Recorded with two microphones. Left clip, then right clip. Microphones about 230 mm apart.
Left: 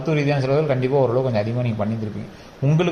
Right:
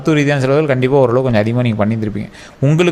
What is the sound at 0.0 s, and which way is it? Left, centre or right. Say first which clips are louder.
A man's voice: right 7 dB; right.